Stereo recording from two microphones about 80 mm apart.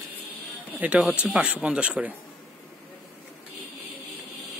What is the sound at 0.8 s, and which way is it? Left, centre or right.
Speech, centre.